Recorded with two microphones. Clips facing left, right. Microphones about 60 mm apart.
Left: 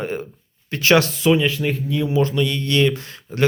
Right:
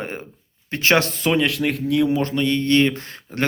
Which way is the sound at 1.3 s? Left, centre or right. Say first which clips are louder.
Left 1 dB; right.